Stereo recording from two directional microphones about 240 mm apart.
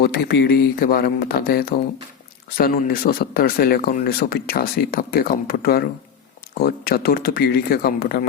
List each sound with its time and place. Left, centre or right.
0.0 s speech: left